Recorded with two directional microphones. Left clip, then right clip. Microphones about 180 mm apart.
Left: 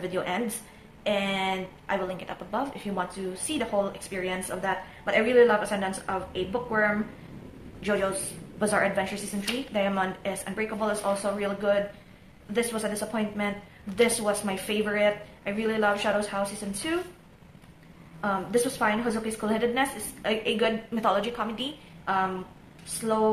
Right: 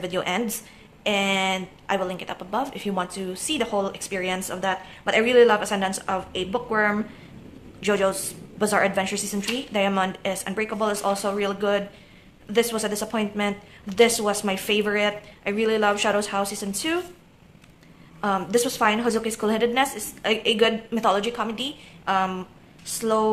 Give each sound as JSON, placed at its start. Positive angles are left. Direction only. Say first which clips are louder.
{"t": 0.0, "sound": "speech", "louder": "right 4 dB", "side_deg": -45}
{"t": 18.2, "sound": "speech", "louder": "right 4 dB", "side_deg": -45}